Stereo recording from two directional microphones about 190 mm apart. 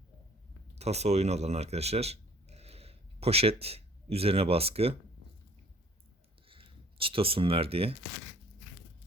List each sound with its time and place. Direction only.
0.8 s speech: 35° right (ahead or behind)
6.5 s speech: 30° right (ahead or behind)